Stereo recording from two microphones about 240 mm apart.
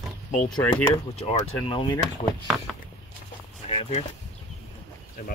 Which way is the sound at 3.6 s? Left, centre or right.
Left.